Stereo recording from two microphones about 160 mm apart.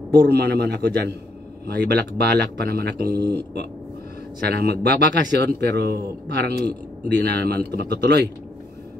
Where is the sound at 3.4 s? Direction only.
90° right.